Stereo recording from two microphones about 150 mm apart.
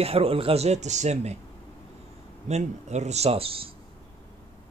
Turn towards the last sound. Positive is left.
turn(degrees=-40)  # may be behind; listen again after turning